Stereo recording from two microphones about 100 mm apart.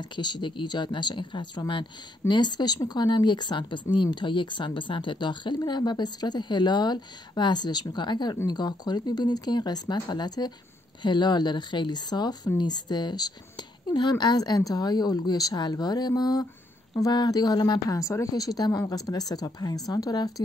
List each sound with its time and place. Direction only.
0.0 s a woman's voice: 50° left (ahead or behind)